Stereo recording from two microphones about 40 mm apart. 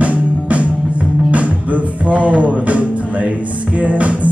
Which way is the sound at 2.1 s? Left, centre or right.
Right.